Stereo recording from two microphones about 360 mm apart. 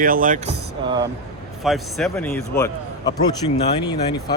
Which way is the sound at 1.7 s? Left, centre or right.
Centre.